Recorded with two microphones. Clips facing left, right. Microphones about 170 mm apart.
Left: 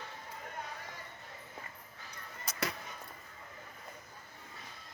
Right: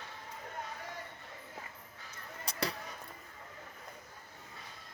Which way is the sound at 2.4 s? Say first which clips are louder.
Right 1 dB; 30° right (ahead or behind).